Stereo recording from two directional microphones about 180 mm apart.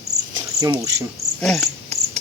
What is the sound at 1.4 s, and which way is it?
Cricket, centre (ahead or behind).